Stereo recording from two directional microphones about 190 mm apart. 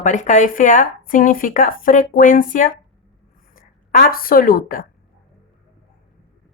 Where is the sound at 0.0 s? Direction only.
40° left (ahead or behind).